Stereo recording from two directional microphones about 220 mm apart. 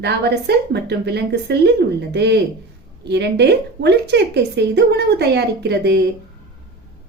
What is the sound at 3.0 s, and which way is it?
A woman's voice, 50° right (ahead or behind).